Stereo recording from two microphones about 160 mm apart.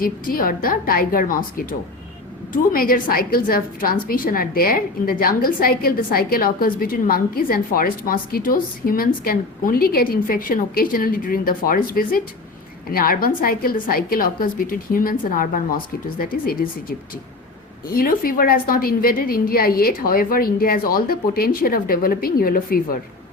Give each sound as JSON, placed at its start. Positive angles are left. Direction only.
{"t": 0.0, "sound": "a woman's voice", "side_deg": 60}
{"t": 17.8, "sound": "a woman's voice", "side_deg": 65}